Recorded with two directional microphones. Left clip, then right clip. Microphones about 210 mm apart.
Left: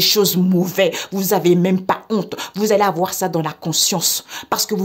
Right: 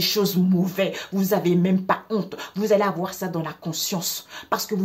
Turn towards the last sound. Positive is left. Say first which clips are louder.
# left 5 dB
turn(degrees=60)  # may be behind; listen again after turning